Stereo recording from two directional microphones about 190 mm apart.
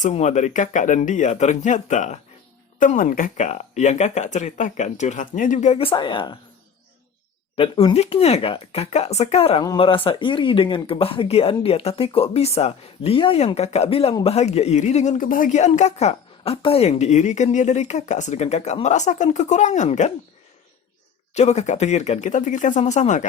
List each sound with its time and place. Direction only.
0.0 s speech: 40° left (ahead or behind)
7.5 s speech: 30° left (ahead or behind)
21.3 s speech: 35° left (ahead or behind)